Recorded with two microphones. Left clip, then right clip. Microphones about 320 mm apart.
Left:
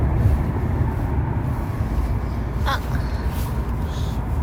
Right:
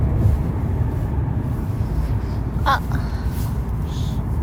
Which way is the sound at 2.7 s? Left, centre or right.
Centre.